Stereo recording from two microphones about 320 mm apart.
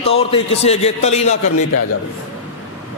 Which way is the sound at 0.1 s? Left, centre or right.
Centre.